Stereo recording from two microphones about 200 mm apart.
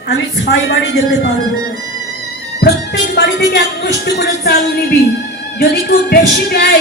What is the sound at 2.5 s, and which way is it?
Speech, 55° left (ahead or behind).